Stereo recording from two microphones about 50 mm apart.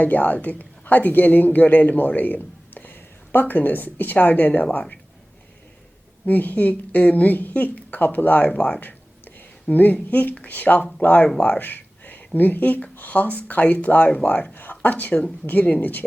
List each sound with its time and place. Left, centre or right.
0.0 s a woman's voice: left
6.2 s a woman's voice: left
14.5 s a sound: left
14.8 s a woman's voice: left